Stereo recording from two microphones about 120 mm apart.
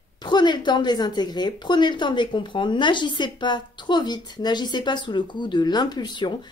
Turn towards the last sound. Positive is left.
turn(degrees=40)  # may be behind; listen again after turning